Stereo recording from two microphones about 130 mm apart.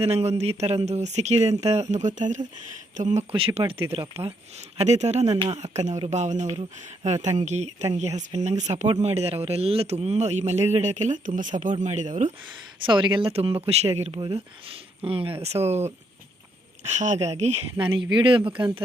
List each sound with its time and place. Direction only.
0.0 s speech: 55° right (ahead or behind)
3.3 s speech: 45° right (ahead or behind)
4.8 s speech: 60° right (ahead or behind)
12.8 s speech: 40° right (ahead or behind); by 17.6 s 55° right (ahead or behind)
17.7 s speech: 40° right (ahead or behind)